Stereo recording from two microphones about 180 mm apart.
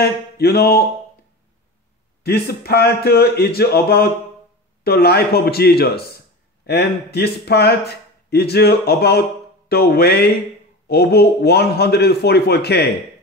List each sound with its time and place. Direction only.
0.0 s speech: 60° left (ahead or behind)
2.2 s speech: 60° left (ahead or behind)